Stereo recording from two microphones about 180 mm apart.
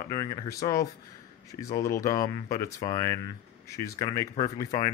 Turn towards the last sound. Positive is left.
turn(degrees=20)  # may be behind; listen again after turning